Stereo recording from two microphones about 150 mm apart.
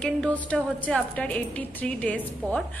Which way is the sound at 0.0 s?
10° left (ahead or behind).